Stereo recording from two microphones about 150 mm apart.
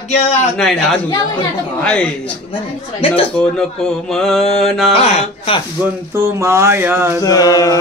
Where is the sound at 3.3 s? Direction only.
5° left (ahead or behind).